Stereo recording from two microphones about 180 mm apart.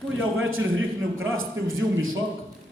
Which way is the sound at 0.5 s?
90° right.